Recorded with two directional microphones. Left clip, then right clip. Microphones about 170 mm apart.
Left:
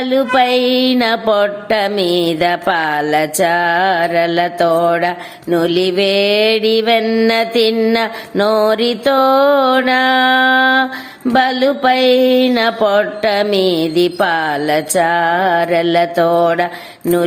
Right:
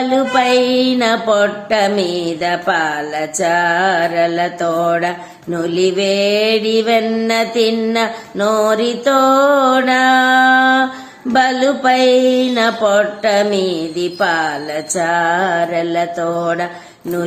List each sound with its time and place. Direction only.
0.0 s mantra: 40° left (ahead or behind)